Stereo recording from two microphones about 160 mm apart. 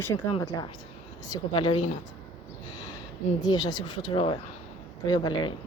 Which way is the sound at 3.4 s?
25° left (ahead or behind).